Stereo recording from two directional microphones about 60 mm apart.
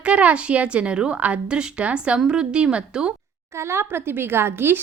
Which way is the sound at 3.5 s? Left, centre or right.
Right.